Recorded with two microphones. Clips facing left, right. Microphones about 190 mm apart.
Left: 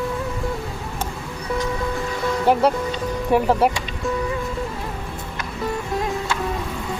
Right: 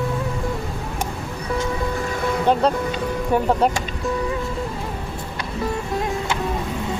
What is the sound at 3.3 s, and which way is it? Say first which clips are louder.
Speech: left 1 dB; 5° left (ahead or behind).